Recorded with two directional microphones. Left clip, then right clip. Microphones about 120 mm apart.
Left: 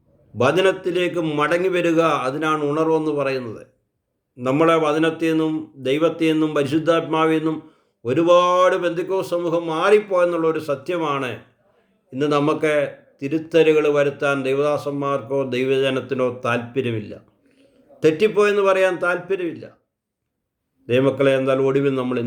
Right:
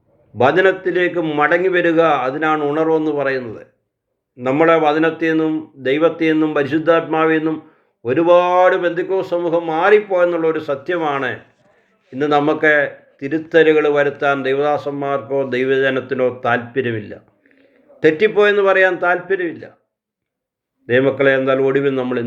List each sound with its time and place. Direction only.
0.3 s a man's voice: 25° left (ahead or behind)
20.8 s a man's voice: 25° left (ahead or behind)